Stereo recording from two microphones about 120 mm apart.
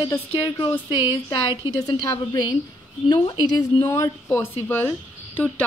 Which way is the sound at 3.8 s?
20° left (ahead or behind).